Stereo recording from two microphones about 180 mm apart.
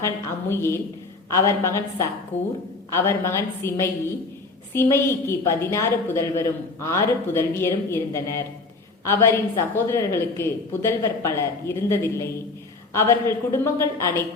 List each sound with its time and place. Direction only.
0.0 s a woman's voice: 15° left (ahead or behind)
2.3 s a woman's voice: 40° left (ahead or behind)
2.9 s a woman's voice: 15° left (ahead or behind)